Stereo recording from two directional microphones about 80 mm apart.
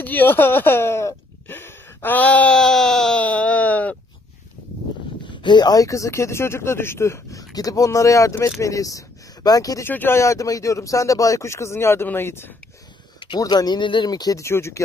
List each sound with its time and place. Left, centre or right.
0.0 s a sound: left; by 3.3 s centre
3.3 s a sound: centre
5.3 s speech: left
9.8 s speech: left
13.4 s speech: left
14.0 s speech: left
14.4 s speech: left